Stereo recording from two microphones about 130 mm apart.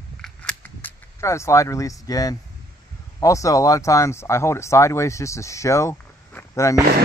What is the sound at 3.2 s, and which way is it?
Speech, 25° left (ahead or behind).